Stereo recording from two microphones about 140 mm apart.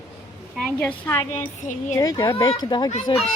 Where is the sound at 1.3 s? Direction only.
60° left (ahead or behind).